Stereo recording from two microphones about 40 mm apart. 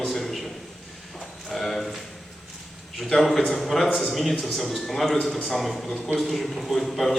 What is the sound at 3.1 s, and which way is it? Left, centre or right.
A man's voice, centre.